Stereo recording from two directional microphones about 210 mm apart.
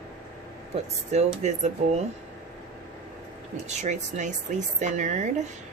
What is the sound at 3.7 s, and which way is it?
Speech, 35° right (ahead or behind).